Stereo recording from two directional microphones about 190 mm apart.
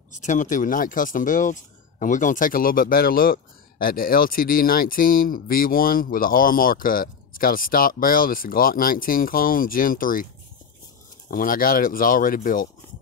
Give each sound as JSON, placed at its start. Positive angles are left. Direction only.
{"t": 0.1, "sound": "speech", "side_deg": 40}
{"t": 11.2, "sound": "speech", "side_deg": 45}